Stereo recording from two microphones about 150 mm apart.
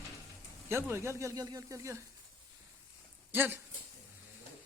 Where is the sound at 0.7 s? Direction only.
15° right (ahead or behind).